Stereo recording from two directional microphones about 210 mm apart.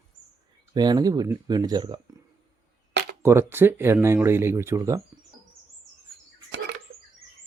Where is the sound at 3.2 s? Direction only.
10° right (ahead or behind).